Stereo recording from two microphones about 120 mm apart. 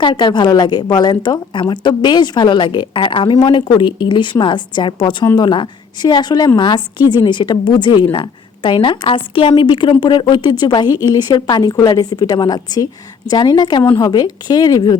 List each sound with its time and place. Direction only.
0.0 s a woman's voice: 40° left (ahead or behind)